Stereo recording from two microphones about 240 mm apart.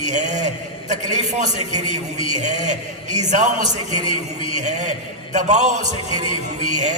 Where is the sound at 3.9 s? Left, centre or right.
Left.